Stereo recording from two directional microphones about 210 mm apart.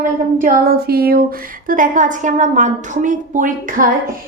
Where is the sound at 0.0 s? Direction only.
40° right (ahead or behind).